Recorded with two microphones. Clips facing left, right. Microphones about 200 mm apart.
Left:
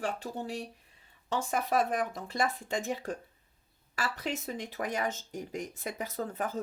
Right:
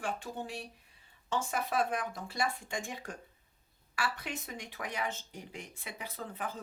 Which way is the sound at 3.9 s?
40° left (ahead or behind).